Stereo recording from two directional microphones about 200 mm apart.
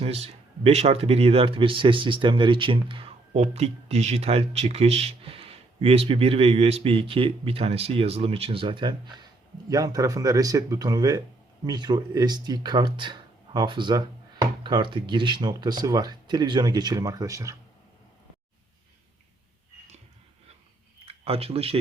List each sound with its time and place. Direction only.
0.0 s speech: 30° right (ahead or behind); by 17.6 s 15° right (ahead or behind)
21.1 s speech: 30° right (ahead or behind)